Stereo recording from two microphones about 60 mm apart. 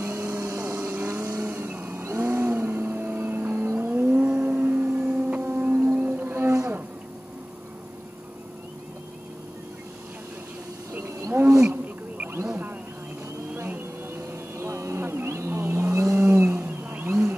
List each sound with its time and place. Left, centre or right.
0.0 s a sound: right
0.7 s vehicle: right
2.0 s vehicle: right
4.4 s a sound: right
5.6 s music: right
10.9 s wild animals: right
11.6 s wild animals: right
13.7 s wild animals: right
16.4 s vehicle: right